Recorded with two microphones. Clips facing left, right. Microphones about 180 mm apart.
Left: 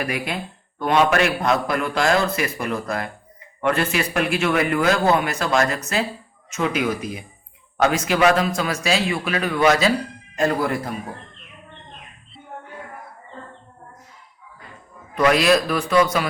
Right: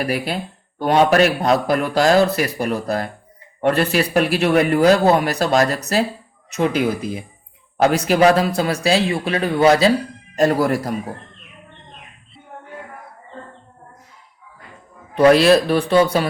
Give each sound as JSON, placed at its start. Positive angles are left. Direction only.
{"t": 0.0, "sound": "speech", "side_deg": -35}
{"t": 15.1, "sound": "speech", "side_deg": -30}